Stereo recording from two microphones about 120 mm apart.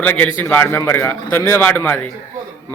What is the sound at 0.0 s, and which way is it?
A man's voice, 15° left (ahead or behind).